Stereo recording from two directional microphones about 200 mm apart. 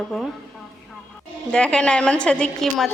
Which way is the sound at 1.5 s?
5° left (ahead or behind).